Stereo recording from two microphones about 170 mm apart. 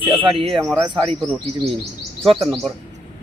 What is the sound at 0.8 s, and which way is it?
Speech, 30° right (ahead or behind).